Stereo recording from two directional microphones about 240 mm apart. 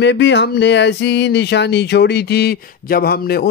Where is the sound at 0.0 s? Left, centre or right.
Left.